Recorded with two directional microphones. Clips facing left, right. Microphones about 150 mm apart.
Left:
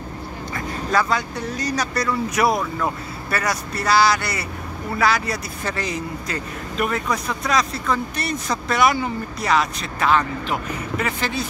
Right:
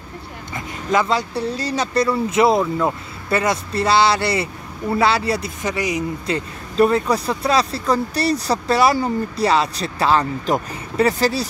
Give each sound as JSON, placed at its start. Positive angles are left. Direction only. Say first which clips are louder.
{"t": 0.6, "sound": "speech", "louder": "right 2 dB", "side_deg": -20}
{"t": 5.6, "sound": "speech", "louder": "right 4 dB", "side_deg": -15}
{"t": 6.2, "sound": "speech", "louder": "right 4 dB", "side_deg": -30}